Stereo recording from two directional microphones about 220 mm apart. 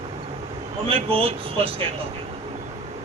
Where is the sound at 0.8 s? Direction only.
25° right (ahead or behind).